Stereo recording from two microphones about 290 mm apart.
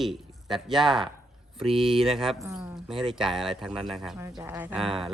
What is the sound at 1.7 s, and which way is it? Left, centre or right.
Speech, centre.